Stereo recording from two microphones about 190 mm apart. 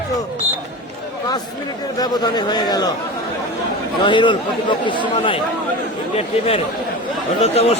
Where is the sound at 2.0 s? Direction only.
20° left (ahead or behind).